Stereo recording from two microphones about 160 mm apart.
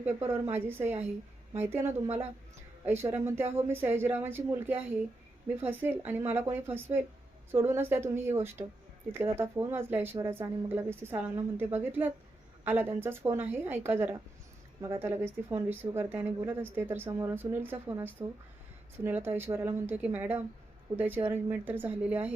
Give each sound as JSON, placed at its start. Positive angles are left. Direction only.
{"t": 0.0, "sound": "speech", "side_deg": -15}